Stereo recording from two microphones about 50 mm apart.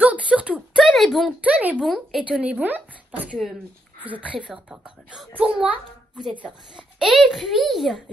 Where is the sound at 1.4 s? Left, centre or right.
Right.